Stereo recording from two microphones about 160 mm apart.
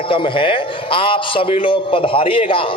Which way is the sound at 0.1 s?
30° left (ahead or behind).